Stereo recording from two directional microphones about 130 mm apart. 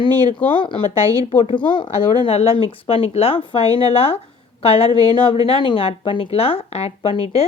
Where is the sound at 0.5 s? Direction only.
40° left (ahead or behind).